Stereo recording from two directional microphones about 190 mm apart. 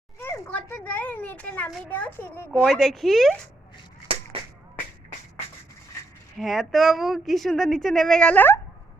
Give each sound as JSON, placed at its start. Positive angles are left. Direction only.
{"t": 0.2, "sound": "a child's voice", "side_deg": 10}
{"t": 4.3, "sound": "a sound", "side_deg": -30}
{"t": 6.3, "sound": "a woman's voice", "side_deg": 0}